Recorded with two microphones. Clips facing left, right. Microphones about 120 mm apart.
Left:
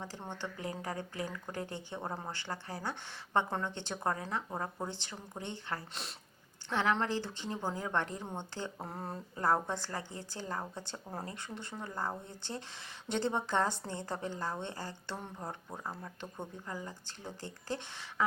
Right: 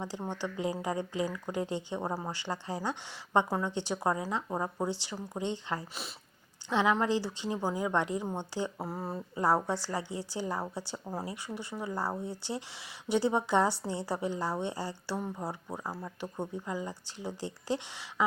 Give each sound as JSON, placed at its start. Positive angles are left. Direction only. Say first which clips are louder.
{"t": 0.0, "sound": "speech", "louder": "right 6 dB", "side_deg": -15}
{"t": 5.9, "sound": "speech", "louder": "right 2 dB", "side_deg": -5}
{"t": 6.7, "sound": "speech", "louder": "right 4 dB", "side_deg": -15}
{"t": 8.8, "sound": "speech", "louder": "right 5 dB", "side_deg": -5}
{"t": 16.0, "sound": "speech", "louder": "right 6 dB", "side_deg": -20}